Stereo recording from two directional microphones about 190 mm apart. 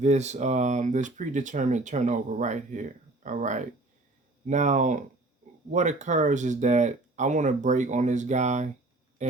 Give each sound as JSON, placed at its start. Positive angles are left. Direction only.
{"t": 0.0, "sound": "speech", "side_deg": -35}